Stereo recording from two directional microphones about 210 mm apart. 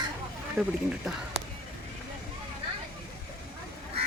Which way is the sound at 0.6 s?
Centre (ahead or behind).